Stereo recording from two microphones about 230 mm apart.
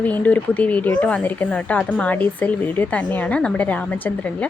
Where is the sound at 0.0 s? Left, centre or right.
Centre.